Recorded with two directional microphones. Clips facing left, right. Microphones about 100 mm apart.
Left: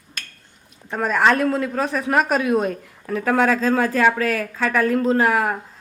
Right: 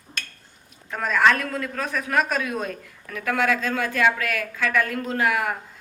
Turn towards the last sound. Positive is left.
turn(degrees=35)  # may be behind; listen again after turning